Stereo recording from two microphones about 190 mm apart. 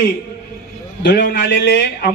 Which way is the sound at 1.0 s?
55° left (ahead or behind).